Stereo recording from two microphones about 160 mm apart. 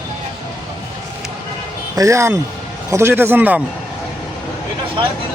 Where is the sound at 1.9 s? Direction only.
20° right (ahead or behind).